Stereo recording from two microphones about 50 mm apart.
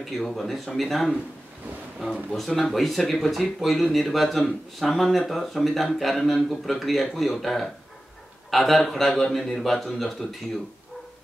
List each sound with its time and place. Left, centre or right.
0.2 s speech: centre
2.3 s speech: centre